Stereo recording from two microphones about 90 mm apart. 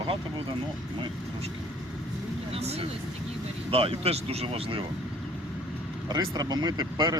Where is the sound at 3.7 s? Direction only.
90° right.